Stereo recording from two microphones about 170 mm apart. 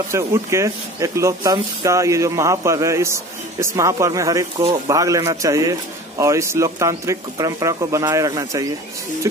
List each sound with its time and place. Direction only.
0.1 s a man's voice: 15° right (ahead or behind)